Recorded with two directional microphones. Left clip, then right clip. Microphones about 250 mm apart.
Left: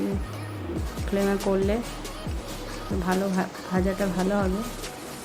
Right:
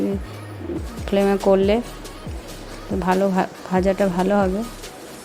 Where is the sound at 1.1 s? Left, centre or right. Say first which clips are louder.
Right 8 dB; right.